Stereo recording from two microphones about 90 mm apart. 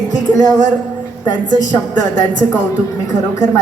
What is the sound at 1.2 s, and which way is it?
Speech, 50° left (ahead or behind).